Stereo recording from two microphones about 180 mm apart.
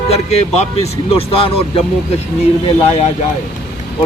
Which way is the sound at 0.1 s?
35° left (ahead or behind).